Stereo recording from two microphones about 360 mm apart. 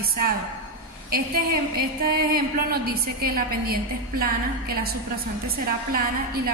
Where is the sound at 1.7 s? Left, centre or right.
Right.